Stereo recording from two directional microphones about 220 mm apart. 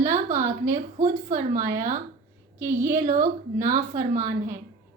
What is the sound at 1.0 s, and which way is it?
Speech, 35° right (ahead or behind).